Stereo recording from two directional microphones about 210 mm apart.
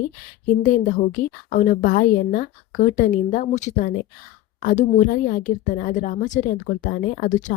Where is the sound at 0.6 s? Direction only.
40° left (ahead or behind).